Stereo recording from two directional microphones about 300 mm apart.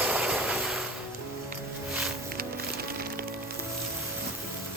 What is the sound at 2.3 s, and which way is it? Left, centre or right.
Music, right.